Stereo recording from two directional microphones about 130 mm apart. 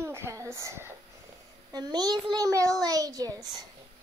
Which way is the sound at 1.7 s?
30° right (ahead or behind).